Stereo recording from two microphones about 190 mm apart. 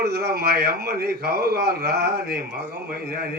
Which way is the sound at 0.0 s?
55° right (ahead or behind).